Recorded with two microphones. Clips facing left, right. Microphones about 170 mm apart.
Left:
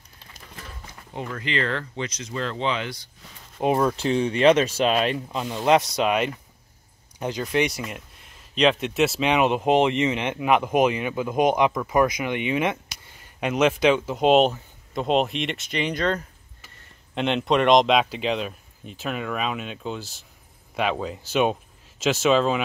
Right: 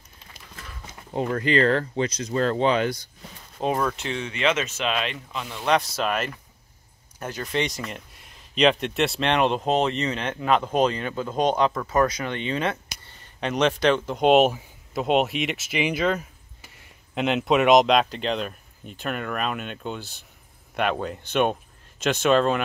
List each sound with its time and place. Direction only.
1.3 s speech: 45° right (ahead or behind)
3.5 s speech: 20° left (ahead or behind)
5.9 s speech: 15° left (ahead or behind)